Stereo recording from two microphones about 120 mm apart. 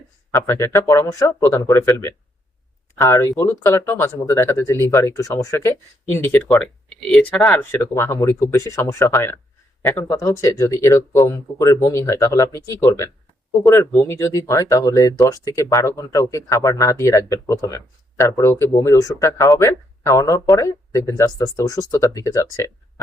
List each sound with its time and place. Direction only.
0.3 s speech: 20° left (ahead or behind)
7.5 s speech: 20° left (ahead or behind)